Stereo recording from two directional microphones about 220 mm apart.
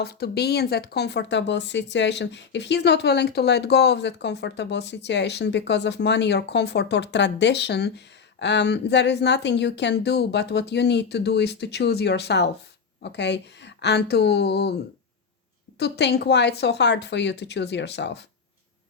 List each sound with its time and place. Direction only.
0.0 s speech: 45° left (ahead or behind)
15.8 s speech: 50° left (ahead or behind)